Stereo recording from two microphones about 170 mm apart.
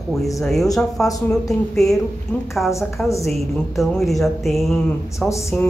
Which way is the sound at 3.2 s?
Centre (ahead or behind).